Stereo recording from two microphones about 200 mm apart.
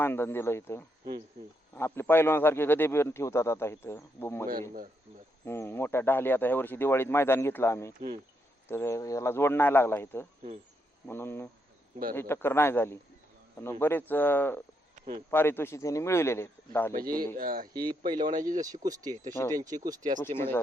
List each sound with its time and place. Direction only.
0.0 s speech: 10° left (ahead or behind)
5.5 s speech: 10° left (ahead or behind)
14.9 s a sound: 45° right (ahead or behind)
15.3 s speech: 10° left (ahead or behind)
16.9 s a man's voice: 45° right (ahead or behind)
17.7 s speech: 20° right (ahead or behind)
18.3 s speech: 40° right (ahead or behind)
18.8 s speech: 20° right (ahead or behind)
20.2 s speech: 10° left (ahead or behind)